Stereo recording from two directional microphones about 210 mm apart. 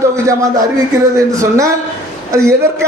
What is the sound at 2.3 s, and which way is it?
Speech, 15° right (ahead or behind).